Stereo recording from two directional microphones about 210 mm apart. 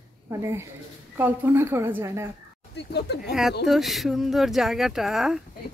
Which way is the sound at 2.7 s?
50° left (ahead or behind).